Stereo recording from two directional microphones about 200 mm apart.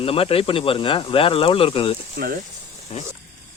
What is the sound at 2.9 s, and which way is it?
Speech, 30° left (ahead or behind).